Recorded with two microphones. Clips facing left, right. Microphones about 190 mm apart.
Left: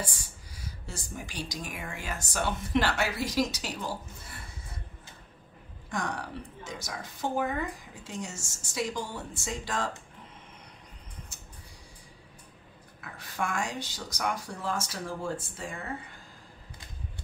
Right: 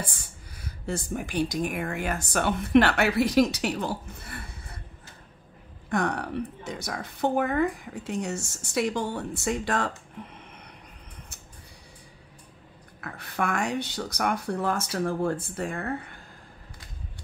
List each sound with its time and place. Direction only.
0.0 s speech: 55° right (ahead or behind)
5.9 s speech: 60° right (ahead or behind)
13.0 s speech: 60° right (ahead or behind)